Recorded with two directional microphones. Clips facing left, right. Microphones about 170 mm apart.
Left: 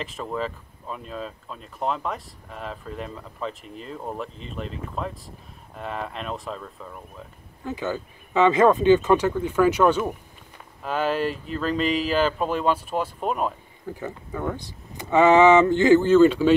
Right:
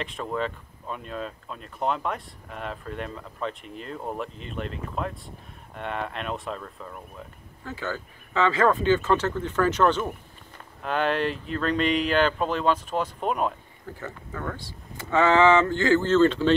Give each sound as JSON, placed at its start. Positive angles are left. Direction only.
{"t": 0.0, "sound": "speech", "side_deg": 0}
{"t": 7.6, "sound": "speech", "side_deg": 15}
{"t": 13.8, "sound": "speech", "side_deg": 15}